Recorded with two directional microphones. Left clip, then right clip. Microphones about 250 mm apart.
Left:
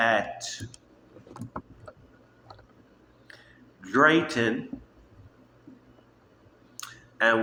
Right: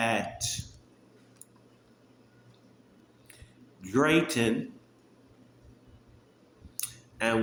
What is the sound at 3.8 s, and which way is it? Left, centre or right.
Speech, right.